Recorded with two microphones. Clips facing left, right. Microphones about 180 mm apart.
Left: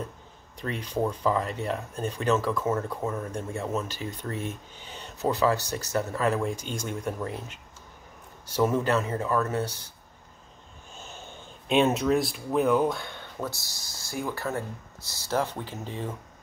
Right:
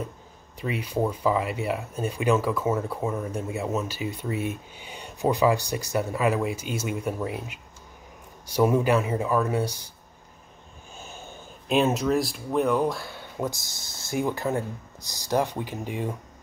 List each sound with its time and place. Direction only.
0.6 s speech: 10° right (ahead or behind)
11.0 s speech: 10° right (ahead or behind)